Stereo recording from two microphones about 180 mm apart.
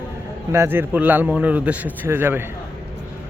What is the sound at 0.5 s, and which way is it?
A man's voice, 15° right (ahead or behind).